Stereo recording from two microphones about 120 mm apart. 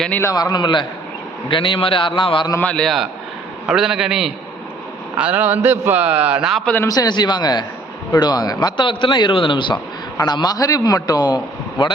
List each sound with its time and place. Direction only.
0.2 s a man's voice: 30° left (ahead or behind)
2.6 s a man's voice: 10° left (ahead or behind); by 6.6 s 5° right (ahead or behind)
6.8 s a man's voice: 30° left (ahead or behind)